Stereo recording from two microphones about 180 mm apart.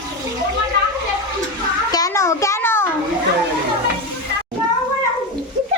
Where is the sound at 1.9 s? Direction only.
20° left (ahead or behind).